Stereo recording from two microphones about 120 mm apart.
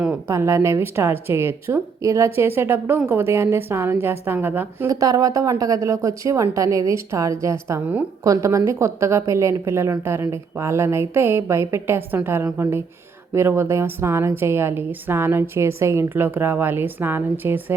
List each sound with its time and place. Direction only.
0.3 s a woman's voice: 25° right (ahead or behind)
4.9 s a woman's voice: 30° right (ahead or behind)